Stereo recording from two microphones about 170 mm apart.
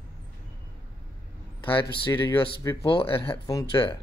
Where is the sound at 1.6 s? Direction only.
30° left (ahead or behind).